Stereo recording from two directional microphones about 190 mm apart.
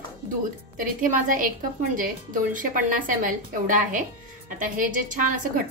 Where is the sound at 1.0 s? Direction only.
45° right (ahead or behind).